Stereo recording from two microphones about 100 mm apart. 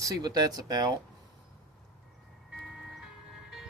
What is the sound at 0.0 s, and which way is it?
Speech, 40° right (ahead or behind).